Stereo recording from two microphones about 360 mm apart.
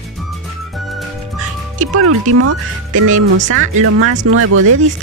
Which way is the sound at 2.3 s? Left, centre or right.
Right.